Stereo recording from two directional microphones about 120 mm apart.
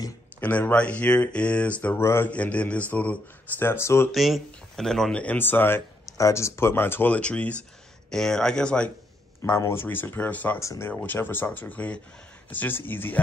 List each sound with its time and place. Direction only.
0.4 s speech: 15° left (ahead or behind)
4.1 s speech: centre (ahead or behind)
9.4 s speech: 20° left (ahead or behind)